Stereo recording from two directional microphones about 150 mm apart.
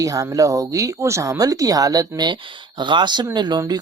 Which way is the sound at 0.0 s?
20° right (ahead or behind).